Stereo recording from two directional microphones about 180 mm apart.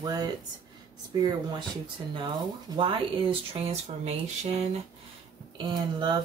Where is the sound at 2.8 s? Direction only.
30° right (ahead or behind).